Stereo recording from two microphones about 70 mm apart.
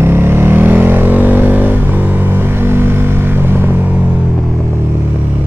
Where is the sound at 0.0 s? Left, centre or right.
Right.